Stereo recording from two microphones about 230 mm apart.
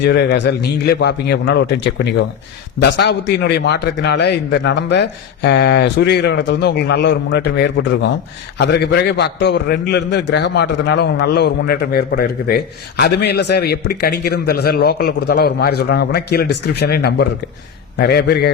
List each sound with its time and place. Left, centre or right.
0.0 s a man's voice: left
3.0 s a man's voice: left